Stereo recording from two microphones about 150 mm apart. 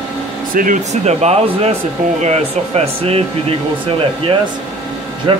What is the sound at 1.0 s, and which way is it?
Speech, 45° right (ahead or behind).